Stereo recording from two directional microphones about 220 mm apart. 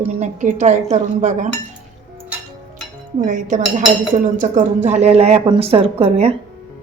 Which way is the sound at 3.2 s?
35° right (ahead or behind).